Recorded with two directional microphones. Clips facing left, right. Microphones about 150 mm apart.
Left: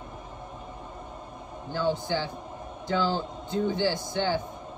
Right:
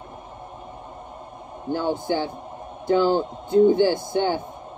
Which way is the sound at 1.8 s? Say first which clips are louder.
Right 2 dB; 55° right (ahead or behind).